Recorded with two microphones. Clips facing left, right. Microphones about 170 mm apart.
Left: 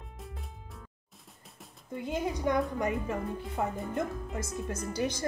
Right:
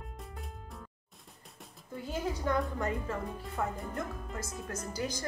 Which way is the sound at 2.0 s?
20° left (ahead or behind).